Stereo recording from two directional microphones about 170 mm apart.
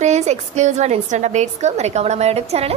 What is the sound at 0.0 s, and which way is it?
A woman's voice, 40° right (ahead or behind).